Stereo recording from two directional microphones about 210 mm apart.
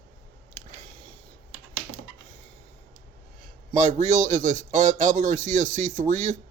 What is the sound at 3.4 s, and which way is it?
A man's voice, 35° right (ahead or behind).